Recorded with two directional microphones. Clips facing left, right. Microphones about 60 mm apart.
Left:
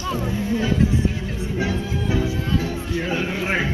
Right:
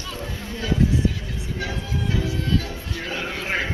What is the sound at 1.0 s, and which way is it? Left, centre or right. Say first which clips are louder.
Music: left 2 dB; left.